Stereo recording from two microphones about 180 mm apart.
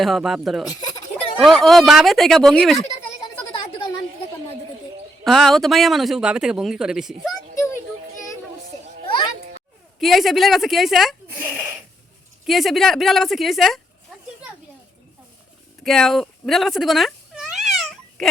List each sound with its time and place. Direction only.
0.0 s speech: centre (ahead or behind)
0.7 s a sound: 20° left (ahead or behind)
1.4 s speech: centre (ahead or behind)
3.2 s a sound: 25° left (ahead or behind)
5.2 s speech: centre (ahead or behind)
10.0 s speech: centre (ahead or behind)
11.3 s a sound: 10° right (ahead or behind)
12.5 s speech: centre (ahead or behind)
15.8 s cat: centre (ahead or behind)